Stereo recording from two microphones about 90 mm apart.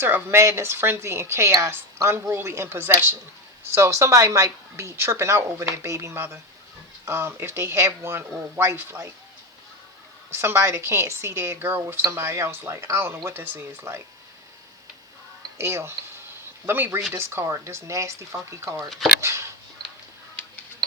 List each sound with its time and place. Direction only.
0.0 s a woman's voice: 25° right (ahead or behind)
10.3 s a woman's voice: 30° right (ahead or behind)
15.5 s a woman's voice: 30° right (ahead or behind)